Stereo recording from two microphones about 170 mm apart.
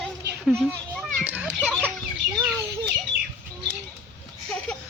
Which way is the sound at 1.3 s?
10° right (ahead or behind).